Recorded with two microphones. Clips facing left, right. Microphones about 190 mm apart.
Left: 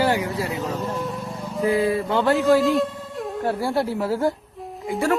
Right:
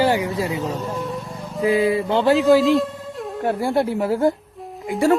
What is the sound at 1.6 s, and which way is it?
Speech, 15° right (ahead or behind).